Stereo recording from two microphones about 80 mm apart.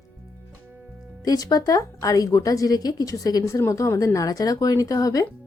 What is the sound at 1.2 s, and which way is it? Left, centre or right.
A woman's voice, left.